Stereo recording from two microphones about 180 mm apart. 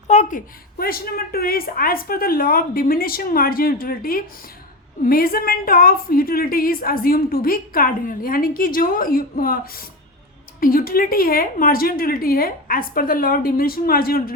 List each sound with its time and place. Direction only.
0.1 s a woman's voice: 45° left (ahead or behind)